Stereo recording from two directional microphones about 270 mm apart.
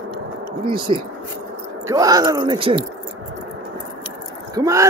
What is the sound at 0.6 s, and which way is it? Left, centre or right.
Speech, centre.